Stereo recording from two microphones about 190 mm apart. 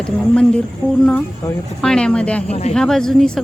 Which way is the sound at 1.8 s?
5° left (ahead or behind).